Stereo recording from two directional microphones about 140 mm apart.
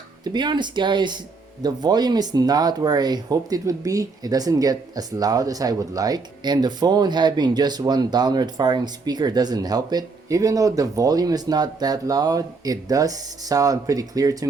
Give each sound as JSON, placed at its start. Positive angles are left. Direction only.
{"t": 0.3, "sound": "speech", "side_deg": -30}